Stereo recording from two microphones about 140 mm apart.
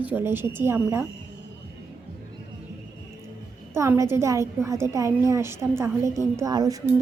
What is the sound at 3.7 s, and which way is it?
A woman's voice, 20° right (ahead or behind).